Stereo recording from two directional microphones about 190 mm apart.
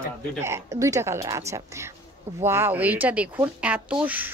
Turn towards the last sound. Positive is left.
turn(degrees=-10)  # may be behind; listen again after turning